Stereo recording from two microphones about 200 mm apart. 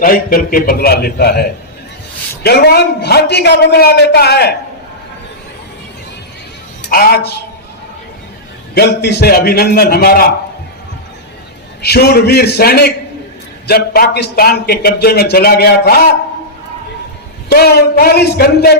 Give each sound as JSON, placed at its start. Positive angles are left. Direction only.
{"t": 0.0, "sound": "a man's voice", "side_deg": 45}
{"t": 6.8, "sound": "a man's voice", "side_deg": 50}
{"t": 8.7, "sound": "a man's voice", "side_deg": 55}
{"t": 11.8, "sound": "a man's voice", "side_deg": 55}
{"t": 17.5, "sound": "a man's voice", "side_deg": 50}